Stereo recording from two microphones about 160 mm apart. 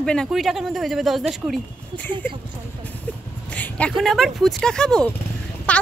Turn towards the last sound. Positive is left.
turn(degrees=5)  # may be behind; listen again after turning